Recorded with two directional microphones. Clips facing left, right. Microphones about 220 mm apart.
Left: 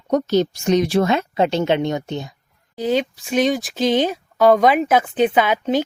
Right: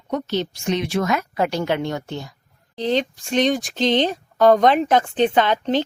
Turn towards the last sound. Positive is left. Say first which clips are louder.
# left 1 dB
turn(degrees=10)  # may be behind; listen again after turning